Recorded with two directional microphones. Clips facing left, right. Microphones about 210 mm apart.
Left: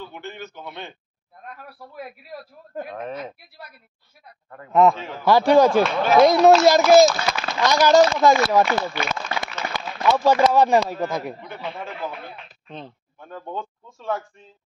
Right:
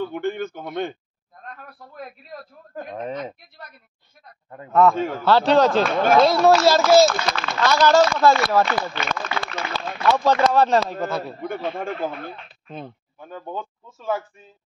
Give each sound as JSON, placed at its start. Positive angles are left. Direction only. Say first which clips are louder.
{"t": 0.0, "sound": "speech", "louder": "right 10 dB", "side_deg": -50}
{"t": 1.4, "sound": "a man's voice", "louder": "left 1 dB", "side_deg": 10}
{"t": 2.9, "sound": "speech", "louder": "right 4 dB", "side_deg": -15}
{"t": 3.2, "sound": "a man's voice", "louder": "right 2 dB", "side_deg": 5}
{"t": 4.9, "sound": "speech", "louder": "right 9 dB", "side_deg": -50}
{"t": 5.2, "sound": "a man's voice", "louder": "left 2 dB", "side_deg": 10}
{"t": 11.4, "sound": "speech", "louder": "right 6 dB", "side_deg": -50}
{"t": 12.6, "sound": "speech", "louder": "right 3 dB", "side_deg": -5}